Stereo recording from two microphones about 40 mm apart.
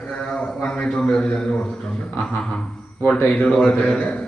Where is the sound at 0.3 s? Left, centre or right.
Centre.